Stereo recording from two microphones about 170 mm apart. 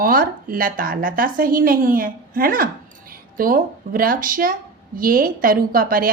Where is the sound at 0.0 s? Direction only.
55° right (ahead or behind).